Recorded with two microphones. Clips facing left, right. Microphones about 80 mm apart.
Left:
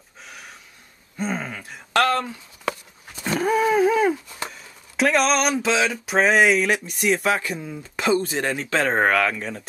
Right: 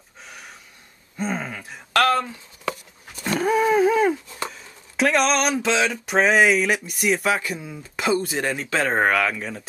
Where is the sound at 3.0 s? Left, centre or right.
Centre.